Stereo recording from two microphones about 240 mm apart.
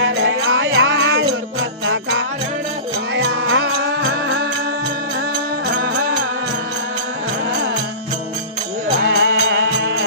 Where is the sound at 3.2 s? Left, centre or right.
Right.